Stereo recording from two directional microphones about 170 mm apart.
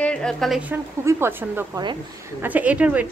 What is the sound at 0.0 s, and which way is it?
A woman's voice, 5° left (ahead or behind).